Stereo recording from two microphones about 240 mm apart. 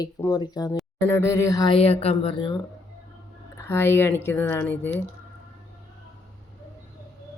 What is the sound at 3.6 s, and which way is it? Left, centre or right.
Speech, centre.